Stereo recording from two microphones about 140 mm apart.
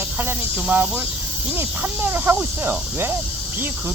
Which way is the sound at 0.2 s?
15° right (ahead or behind).